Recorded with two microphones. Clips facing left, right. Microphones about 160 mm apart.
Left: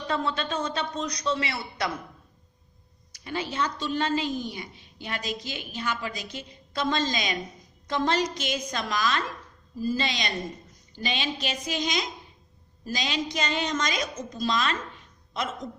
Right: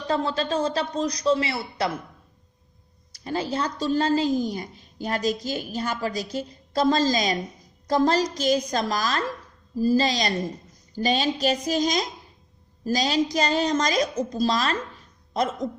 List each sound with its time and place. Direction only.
0.1 s a woman's voice: 30° right (ahead or behind)
3.1 s a woman's voice: 40° right (ahead or behind)